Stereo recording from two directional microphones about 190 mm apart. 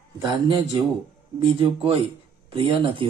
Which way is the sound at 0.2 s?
25° right (ahead or behind).